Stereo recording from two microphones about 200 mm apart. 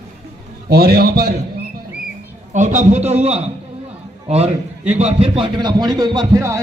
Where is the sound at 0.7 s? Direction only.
50° right (ahead or behind).